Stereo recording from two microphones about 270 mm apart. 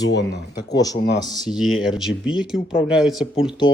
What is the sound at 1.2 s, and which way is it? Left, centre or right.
Speech, centre.